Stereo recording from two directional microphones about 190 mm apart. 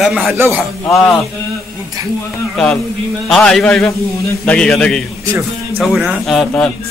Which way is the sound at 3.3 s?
5° left (ahead or behind).